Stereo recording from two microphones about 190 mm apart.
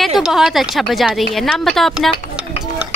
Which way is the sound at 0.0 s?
Centre (ahead or behind).